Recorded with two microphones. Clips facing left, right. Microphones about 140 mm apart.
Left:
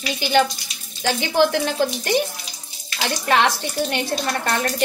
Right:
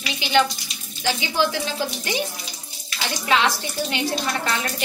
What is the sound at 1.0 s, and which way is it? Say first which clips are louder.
A woman's voice: left 4 dB; 50° left (ahead or behind).